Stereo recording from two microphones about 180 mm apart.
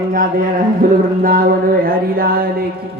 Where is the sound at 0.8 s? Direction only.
55° right (ahead or behind).